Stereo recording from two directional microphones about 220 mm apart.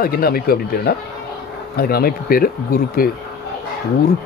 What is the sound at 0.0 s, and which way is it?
Speech, 45° left (ahead or behind).